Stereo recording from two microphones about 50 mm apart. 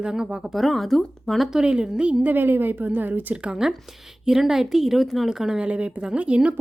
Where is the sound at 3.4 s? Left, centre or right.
Centre.